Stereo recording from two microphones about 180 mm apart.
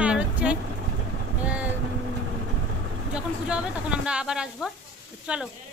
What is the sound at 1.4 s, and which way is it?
Vehicle, 5° right (ahead or behind).